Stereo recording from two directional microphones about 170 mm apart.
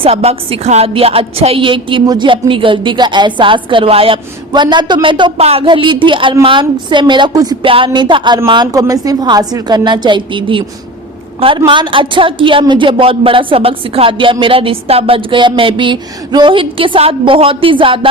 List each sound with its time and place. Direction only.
0.0 s a woman's voice: 35° right (ahead or behind)